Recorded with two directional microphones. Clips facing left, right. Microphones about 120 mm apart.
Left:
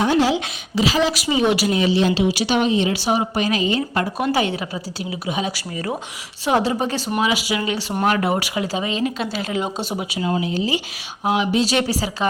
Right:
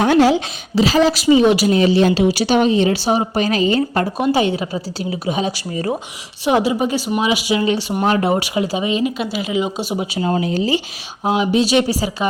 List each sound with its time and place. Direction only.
0.0 s speech: 60° right (ahead or behind)
0.3 s speech: 35° right (ahead or behind)
1.4 s speech: 25° right (ahead or behind)
1.7 s speech: 45° right (ahead or behind)
4.2 s speech: 25° right (ahead or behind)
6.4 s speech: 15° right (ahead or behind)
7.2 s speech: 20° right (ahead or behind)
10.0 s speech: 35° right (ahead or behind)
11.2 s speech: 20° right (ahead or behind)